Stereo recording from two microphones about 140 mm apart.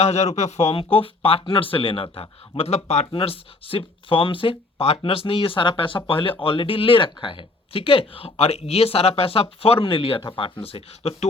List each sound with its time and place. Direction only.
0.0 s speech: 50° left (ahead or behind)